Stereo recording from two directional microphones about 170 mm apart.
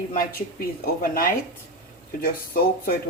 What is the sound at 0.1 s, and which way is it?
Speech, 55° left (ahead or behind).